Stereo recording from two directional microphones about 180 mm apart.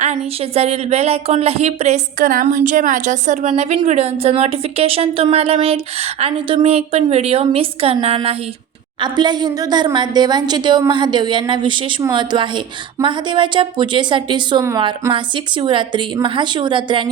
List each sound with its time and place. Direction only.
0.0 s a woman's voice: 35° right (ahead or behind)